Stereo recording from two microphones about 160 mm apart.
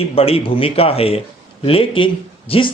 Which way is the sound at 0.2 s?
35° left (ahead or behind).